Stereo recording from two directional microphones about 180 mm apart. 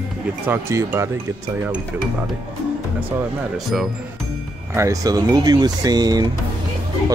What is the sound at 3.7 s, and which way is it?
Speech, centre (ahead or behind).